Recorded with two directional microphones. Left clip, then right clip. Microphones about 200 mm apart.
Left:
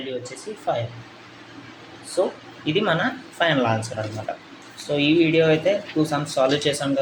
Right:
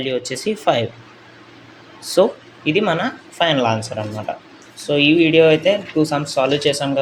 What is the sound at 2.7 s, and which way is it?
Speech, 25° right (ahead or behind).